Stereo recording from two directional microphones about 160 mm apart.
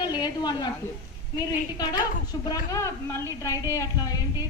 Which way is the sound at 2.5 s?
20° left (ahead or behind).